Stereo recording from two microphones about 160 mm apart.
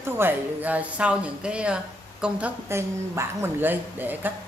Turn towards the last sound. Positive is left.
turn(degrees=-10)  # may be behind; listen again after turning